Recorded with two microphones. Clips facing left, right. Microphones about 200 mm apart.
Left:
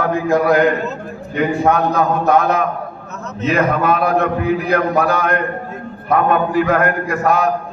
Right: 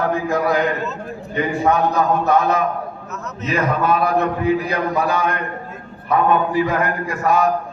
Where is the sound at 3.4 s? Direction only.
55° left (ahead or behind).